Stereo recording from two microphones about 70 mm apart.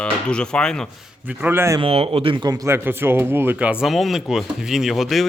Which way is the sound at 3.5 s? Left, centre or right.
Centre.